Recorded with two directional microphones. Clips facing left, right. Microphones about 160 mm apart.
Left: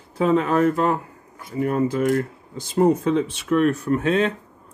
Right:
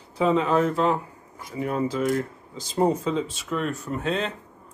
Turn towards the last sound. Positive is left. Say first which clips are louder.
# left 7 dB
turn(degrees=60)  # may be behind; listen again after turning